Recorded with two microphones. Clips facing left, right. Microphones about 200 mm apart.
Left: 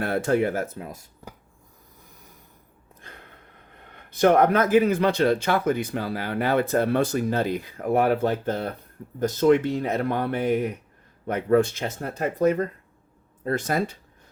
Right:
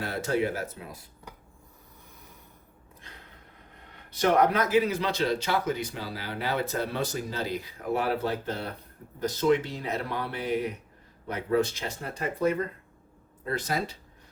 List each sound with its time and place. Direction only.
0.0 s speech: 55° left (ahead or behind)
3.0 s a sound: 55° left (ahead or behind)
3.9 s speech: 50° left (ahead or behind)